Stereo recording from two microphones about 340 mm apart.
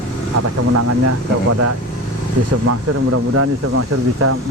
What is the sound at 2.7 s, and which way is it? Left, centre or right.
Speech, right.